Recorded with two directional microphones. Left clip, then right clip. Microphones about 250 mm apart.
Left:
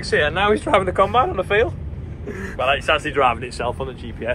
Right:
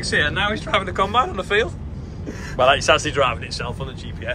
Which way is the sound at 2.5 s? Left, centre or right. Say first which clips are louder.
Right 3 dB; centre.